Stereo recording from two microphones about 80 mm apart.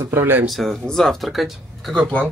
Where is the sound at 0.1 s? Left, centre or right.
Right.